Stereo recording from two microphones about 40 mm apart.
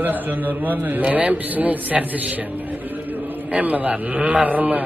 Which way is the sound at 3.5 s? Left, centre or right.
Right.